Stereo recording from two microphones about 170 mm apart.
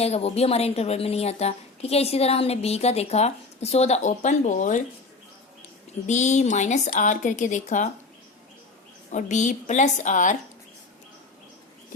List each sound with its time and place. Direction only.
0.0 s a woman's voice: 40° left (ahead or behind)
6.1 s a woman's voice: 45° left (ahead or behind)
9.1 s a woman's voice: 45° left (ahead or behind)